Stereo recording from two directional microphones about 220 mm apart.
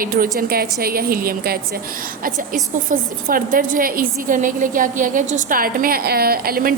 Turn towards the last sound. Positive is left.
turn(degrees=-40)  # may be behind; listen again after turning